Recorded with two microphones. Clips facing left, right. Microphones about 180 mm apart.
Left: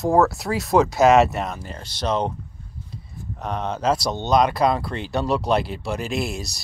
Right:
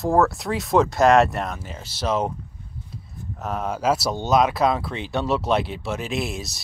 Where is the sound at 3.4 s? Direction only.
5° right (ahead or behind).